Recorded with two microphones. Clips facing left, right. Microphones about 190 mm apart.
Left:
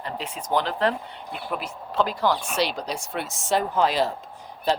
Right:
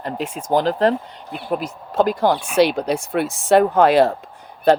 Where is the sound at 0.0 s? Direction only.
50° right (ahead or behind).